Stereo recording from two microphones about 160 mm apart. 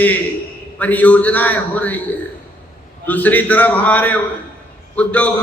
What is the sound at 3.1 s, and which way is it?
A man's voice, 10° left (ahead or behind).